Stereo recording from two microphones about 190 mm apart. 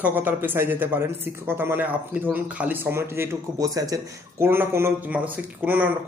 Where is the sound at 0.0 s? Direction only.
10° right (ahead or behind).